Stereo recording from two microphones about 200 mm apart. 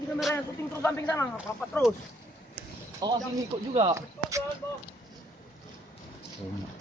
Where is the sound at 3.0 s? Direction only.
20° right (ahead or behind).